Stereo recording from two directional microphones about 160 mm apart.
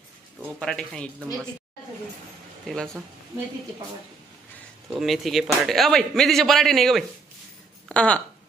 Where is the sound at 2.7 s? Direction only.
5° left (ahead or behind).